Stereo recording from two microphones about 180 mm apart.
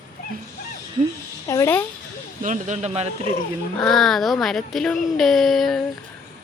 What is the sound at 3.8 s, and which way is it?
Speech, centre (ahead or behind).